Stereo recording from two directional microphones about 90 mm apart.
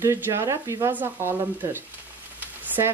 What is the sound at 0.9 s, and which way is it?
Stir, 25° right (ahead or behind).